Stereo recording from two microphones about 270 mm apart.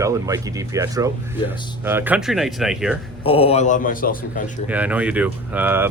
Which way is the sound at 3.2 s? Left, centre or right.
Left.